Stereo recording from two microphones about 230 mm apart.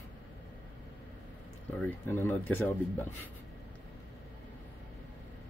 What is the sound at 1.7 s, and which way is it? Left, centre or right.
Speech, centre.